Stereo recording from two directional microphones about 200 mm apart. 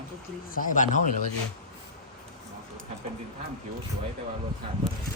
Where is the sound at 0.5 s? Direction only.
40° left (ahead or behind).